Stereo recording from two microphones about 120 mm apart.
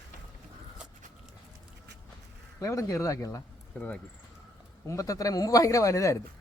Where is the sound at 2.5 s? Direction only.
25° left (ahead or behind).